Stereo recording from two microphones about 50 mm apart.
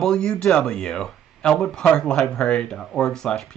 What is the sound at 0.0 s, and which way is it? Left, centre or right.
Speech, centre.